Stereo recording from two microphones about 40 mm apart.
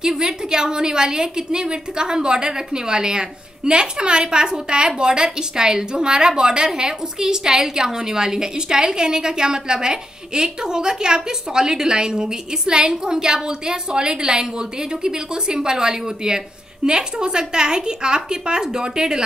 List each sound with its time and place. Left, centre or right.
0.0 s a woman's voice: centre